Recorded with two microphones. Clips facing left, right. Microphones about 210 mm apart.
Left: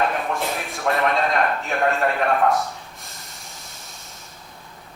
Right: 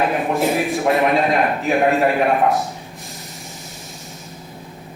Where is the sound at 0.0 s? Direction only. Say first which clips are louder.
Right 4 dB; 15° right (ahead or behind).